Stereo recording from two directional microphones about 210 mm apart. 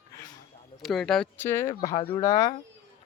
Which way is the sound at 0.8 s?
Centre (ahead or behind).